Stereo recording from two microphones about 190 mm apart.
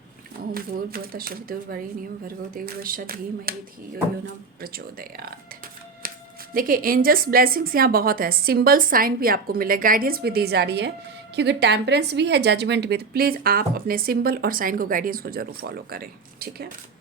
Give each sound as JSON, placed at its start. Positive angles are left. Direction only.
{"t": 0.5, "sound": "a woman's voice", "side_deg": -50}
{"t": 4.6, "sound": "a woman's voice", "side_deg": -50}
{"t": 6.5, "sound": "a woman's voice", "side_deg": -50}